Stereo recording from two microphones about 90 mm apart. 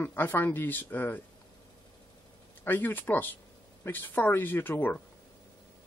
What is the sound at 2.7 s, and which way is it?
Speech, 25° left (ahead or behind).